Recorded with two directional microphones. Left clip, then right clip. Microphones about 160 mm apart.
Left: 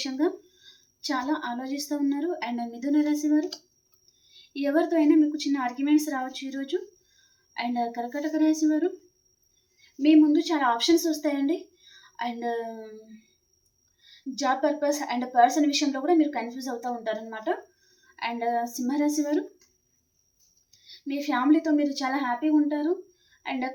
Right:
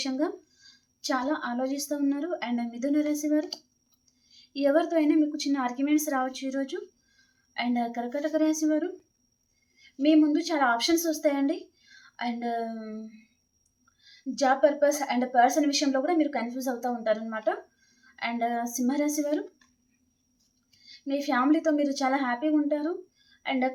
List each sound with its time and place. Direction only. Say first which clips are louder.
0.0 s a woman's voice: left 2 dB; 30° right (ahead or behind)
4.5 s a woman's voice: even; 30° right (ahead or behind)
10.0 s a woman's voice: left 3 dB; 35° right (ahead or behind)
14.3 s a woman's voice: right 3 dB; 35° right (ahead or behind)
21.1 s a woman's voice: left 1 dB; 30° right (ahead or behind)